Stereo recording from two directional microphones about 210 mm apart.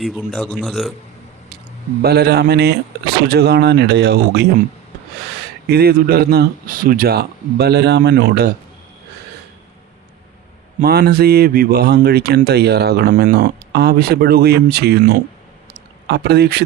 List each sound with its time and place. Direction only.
0.0 s speech: centre (ahead or behind)
2.0 s speech: 50° right (ahead or behind)
5.6 s speech: 45° right (ahead or behind)
10.8 s speech: 45° right (ahead or behind)